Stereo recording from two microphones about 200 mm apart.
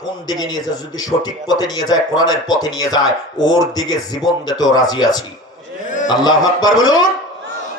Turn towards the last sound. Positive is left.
turn(degrees=20)  # may be behind; listen again after turning